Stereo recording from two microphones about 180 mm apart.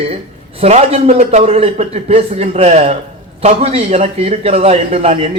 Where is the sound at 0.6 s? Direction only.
35° right (ahead or behind).